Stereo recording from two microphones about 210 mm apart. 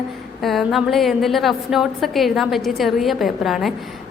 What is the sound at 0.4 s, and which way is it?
A woman's voice, centre (ahead or behind).